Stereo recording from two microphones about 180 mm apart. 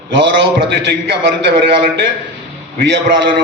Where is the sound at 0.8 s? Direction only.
70° right (ahead or behind).